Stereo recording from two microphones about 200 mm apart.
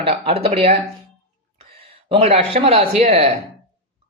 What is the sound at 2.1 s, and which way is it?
Speech, 30° right (ahead or behind).